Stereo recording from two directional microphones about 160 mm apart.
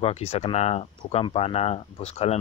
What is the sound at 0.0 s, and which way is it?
Speech, 40° left (ahead or behind).